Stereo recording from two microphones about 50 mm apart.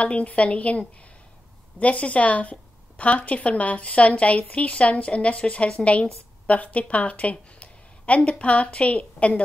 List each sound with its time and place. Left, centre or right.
0.0 s a woman's voice: left